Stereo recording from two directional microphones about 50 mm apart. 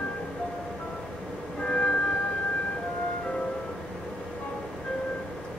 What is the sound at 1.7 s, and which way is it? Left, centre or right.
Music, centre.